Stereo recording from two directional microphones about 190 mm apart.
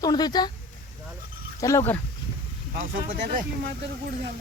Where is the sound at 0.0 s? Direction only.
20° left (ahead or behind).